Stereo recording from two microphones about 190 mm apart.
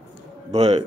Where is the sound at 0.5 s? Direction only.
35° right (ahead or behind).